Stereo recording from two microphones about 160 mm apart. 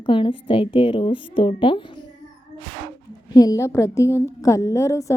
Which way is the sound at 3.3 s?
25° left (ahead or behind).